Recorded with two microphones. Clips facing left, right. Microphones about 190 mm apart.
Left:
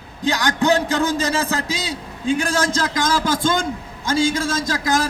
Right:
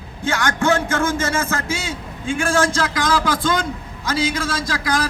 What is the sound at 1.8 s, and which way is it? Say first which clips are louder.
A man's voice: left 2 dB; 40° left (ahead or behind).